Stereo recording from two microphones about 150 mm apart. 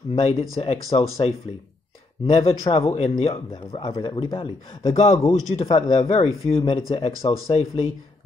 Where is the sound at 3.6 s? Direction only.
40° left (ahead or behind).